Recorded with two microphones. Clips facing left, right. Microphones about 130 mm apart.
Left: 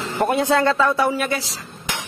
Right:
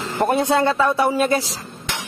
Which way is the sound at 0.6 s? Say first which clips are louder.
Even; 20° right (ahead or behind).